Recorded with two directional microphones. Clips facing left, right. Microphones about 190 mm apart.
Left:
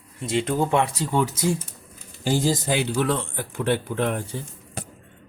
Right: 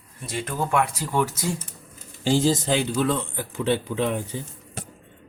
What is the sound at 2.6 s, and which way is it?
Speech, 10° left (ahead or behind).